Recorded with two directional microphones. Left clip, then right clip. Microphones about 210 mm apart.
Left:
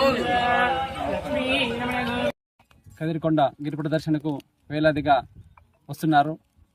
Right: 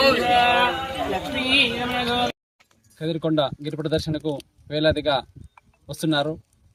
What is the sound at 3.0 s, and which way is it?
Speech, 5° left (ahead or behind).